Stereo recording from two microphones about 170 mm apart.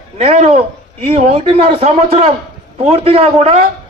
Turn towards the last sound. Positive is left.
turn(degrees=-35)  # may be behind; listen again after turning